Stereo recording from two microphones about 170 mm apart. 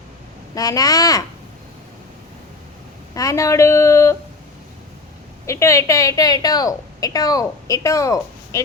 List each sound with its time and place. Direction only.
0.5 s a woman's voice: 20° left (ahead or behind)
3.2 s a woman's voice: 20° left (ahead or behind)
5.5 s a woman's voice: 15° left (ahead or behind)